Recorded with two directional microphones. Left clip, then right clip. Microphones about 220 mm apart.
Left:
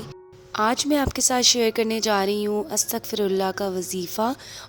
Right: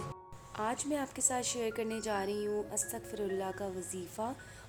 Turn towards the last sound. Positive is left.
turn(degrees=40)  # may be behind; listen again after turning